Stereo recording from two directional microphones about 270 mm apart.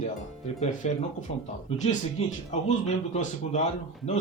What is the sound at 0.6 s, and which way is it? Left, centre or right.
Speech, left.